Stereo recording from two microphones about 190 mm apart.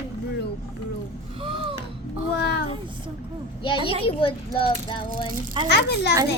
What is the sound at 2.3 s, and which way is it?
Speech, 65° left (ahead or behind).